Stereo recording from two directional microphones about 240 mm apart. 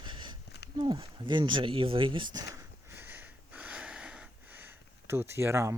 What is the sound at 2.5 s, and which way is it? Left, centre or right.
Sniff, centre.